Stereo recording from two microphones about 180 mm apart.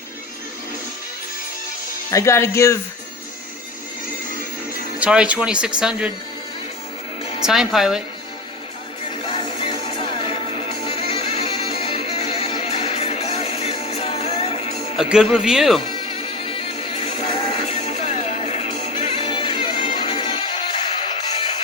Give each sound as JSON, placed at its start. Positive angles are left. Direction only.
{"t": 2.0, "sound": "speech", "side_deg": 15}
{"t": 4.9, "sound": "speech", "side_deg": -5}
{"t": 7.4, "sound": "speech", "side_deg": 0}
{"t": 9.2, "sound": "music", "side_deg": 25}
{"t": 14.9, "sound": "speech", "side_deg": 0}
{"t": 15.9, "sound": "music", "side_deg": 30}